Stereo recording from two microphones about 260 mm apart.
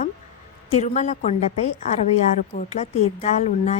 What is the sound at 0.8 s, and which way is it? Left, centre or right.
Speech, left.